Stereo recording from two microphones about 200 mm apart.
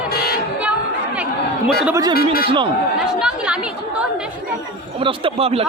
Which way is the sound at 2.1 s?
45° left (ahead or behind).